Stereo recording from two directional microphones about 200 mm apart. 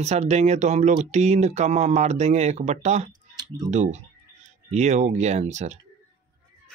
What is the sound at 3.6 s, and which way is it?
Speech, 35° right (ahead or behind).